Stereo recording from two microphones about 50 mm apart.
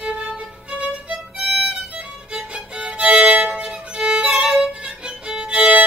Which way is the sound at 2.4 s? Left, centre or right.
Right.